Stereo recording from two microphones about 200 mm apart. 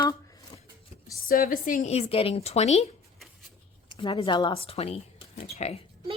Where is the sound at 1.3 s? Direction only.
45° left (ahead or behind).